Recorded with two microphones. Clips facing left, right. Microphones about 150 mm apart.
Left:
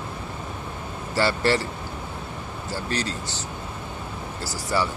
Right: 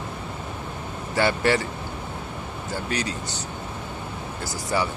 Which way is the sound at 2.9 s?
15° right (ahead or behind).